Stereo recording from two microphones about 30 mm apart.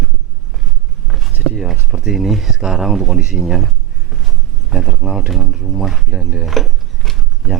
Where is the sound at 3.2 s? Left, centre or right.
Right.